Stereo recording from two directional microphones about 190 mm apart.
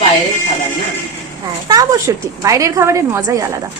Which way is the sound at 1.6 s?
20° right (ahead or behind).